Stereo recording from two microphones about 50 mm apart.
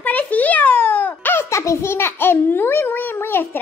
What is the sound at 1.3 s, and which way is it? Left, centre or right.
A child's voice, left.